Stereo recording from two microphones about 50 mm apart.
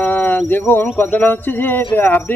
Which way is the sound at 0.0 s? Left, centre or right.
Left.